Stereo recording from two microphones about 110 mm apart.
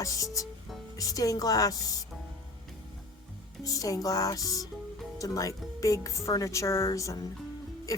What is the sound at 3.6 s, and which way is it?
Speech, 35° left (ahead or behind).